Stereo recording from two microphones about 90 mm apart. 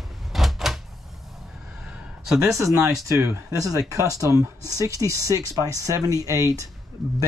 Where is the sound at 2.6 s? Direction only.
35° right (ahead or behind).